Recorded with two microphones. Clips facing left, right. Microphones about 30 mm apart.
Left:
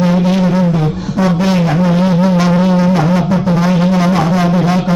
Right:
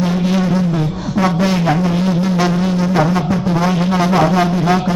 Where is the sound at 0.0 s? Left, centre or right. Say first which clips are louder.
Left 4 dB; centre.